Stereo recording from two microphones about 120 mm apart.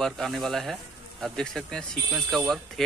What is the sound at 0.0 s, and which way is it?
Speech, centre (ahead or behind).